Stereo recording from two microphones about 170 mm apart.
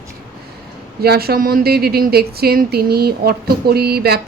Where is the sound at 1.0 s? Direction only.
65° right (ahead or behind).